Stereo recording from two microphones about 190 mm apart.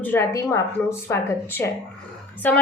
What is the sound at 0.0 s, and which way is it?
A woman's voice, 10° left (ahead or behind).